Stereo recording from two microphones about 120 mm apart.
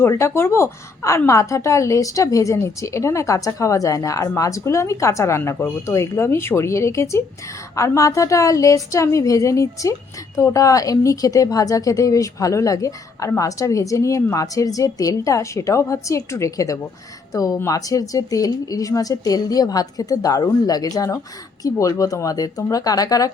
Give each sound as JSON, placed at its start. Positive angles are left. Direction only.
{"t": 0.0, "sound": "speech", "side_deg": 20}